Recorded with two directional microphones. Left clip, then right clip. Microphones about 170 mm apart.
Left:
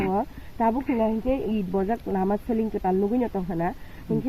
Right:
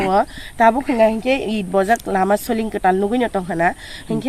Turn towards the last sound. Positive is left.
turn(degrees=-25)  # may be behind; listen again after turning